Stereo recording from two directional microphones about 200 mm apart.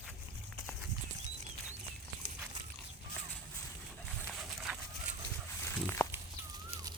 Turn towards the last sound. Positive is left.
turn(degrees=15)  # may be behind; listen again after turning